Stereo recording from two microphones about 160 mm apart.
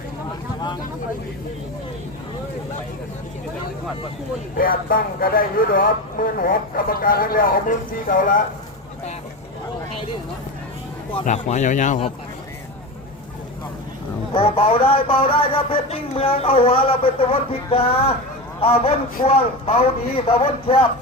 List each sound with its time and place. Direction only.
4.5 s speech: 65° left (ahead or behind)
11.3 s speech: 50° left (ahead or behind)
14.3 s a man's voice: 35° left (ahead or behind)